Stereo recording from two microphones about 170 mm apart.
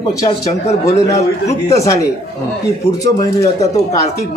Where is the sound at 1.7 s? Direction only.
20° left (ahead or behind).